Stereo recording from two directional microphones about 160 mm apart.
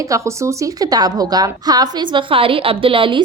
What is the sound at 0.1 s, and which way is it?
A woman's voice, 20° right (ahead or behind).